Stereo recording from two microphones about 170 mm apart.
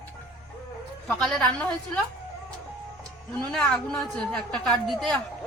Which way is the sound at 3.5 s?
5° left (ahead or behind).